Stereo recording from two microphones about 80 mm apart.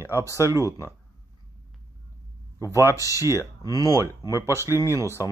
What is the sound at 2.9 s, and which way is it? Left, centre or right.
Speech, left.